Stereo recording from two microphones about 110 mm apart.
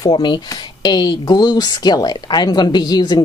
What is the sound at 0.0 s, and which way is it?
Speech, 40° left (ahead or behind).